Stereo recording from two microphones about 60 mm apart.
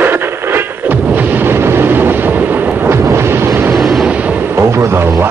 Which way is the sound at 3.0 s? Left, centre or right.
Right.